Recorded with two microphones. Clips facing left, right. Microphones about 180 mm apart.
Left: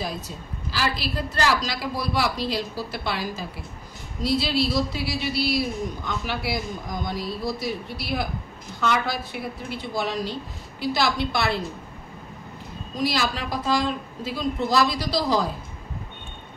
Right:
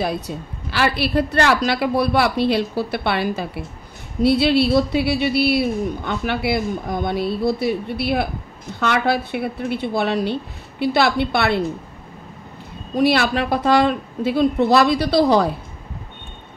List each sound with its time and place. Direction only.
0.7 s a woman's voice: 65° right (ahead or behind)
12.9 s a woman's voice: 65° right (ahead or behind)